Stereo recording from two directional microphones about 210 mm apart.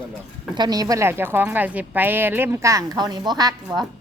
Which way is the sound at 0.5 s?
20° right (ahead or behind).